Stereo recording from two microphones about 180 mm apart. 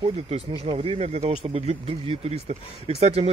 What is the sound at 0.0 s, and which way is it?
Speech, 35° right (ahead or behind).